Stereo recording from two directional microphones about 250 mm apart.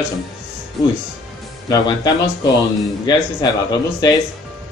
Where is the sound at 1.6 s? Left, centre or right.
Centre.